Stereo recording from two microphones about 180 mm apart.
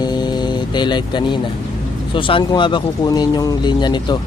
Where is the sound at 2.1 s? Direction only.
30° left (ahead or behind).